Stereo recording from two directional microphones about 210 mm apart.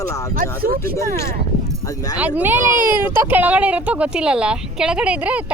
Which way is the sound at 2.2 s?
10° right (ahead or behind).